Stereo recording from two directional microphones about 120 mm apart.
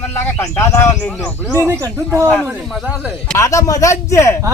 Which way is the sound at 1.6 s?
25° right (ahead or behind).